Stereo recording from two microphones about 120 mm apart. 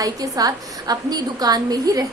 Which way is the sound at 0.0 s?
30° right (ahead or behind).